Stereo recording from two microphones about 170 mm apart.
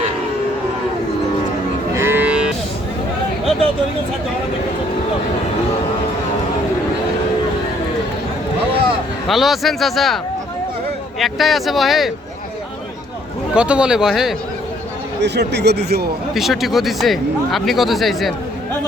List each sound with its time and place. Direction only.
2.0 s moo: 10° right (ahead or behind)
9.2 s speech: centre (ahead or behind)
11.2 s speech: centre (ahead or behind)
13.5 s speech: 5° right (ahead or behind)
15.2 s speech: 80° right
16.3 s speech: centre (ahead or behind)